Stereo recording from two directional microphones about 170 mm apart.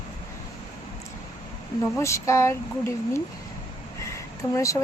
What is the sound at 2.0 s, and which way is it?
A woman's voice, 15° left (ahead or behind).